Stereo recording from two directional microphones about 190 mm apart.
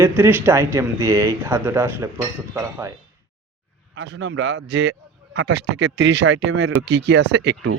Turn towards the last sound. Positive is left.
turn(degrees=-70)  # may be behind; listen again after turning